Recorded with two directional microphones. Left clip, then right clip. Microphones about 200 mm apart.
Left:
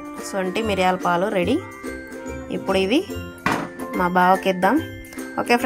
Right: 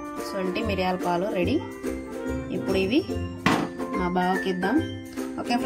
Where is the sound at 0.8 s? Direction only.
50° left (ahead or behind).